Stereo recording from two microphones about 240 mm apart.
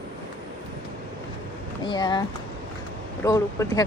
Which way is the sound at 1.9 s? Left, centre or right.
Centre.